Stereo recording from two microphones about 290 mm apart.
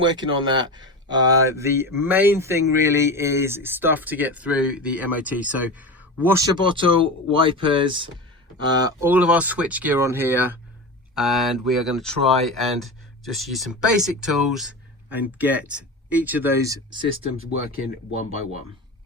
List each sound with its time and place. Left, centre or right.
0.0 s speech: centre